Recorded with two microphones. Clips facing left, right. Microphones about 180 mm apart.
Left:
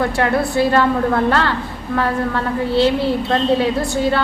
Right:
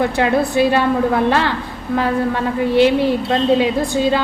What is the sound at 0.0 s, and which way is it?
A woman's voice, 20° right (ahead or behind).